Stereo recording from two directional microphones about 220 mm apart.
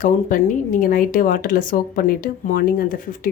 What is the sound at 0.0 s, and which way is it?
A woman's voice, 35° left (ahead or behind).